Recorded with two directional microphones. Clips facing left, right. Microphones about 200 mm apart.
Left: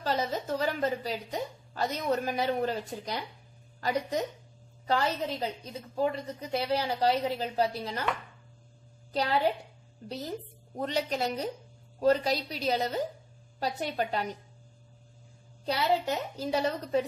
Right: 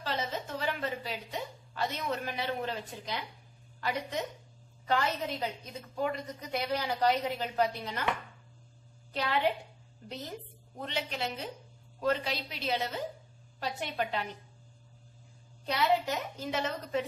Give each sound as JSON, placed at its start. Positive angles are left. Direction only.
{"t": 0.0, "sound": "a woman's voice", "side_deg": 40}
{"t": 4.8, "sound": "a woman's voice", "side_deg": 35}
{"t": 9.1, "sound": "a woman's voice", "side_deg": 35}
{"t": 10.8, "sound": "a woman's voice", "side_deg": 40}
{"t": 15.6, "sound": "a woman's voice", "side_deg": 30}